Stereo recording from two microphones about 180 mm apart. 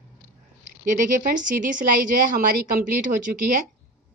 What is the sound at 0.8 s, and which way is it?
A woman's voice, 45° right (ahead or behind).